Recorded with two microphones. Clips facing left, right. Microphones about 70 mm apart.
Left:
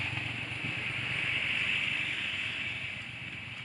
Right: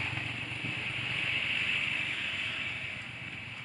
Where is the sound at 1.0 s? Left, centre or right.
Centre.